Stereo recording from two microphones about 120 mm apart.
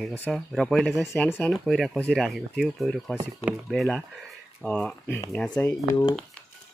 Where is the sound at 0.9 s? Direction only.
25° left (ahead or behind).